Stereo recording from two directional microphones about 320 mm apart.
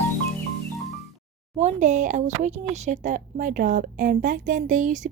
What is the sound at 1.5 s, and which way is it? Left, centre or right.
Speech, right.